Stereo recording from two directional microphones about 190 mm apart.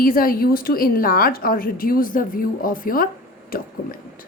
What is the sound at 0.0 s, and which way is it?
A woman's voice, 50° left (ahead or behind).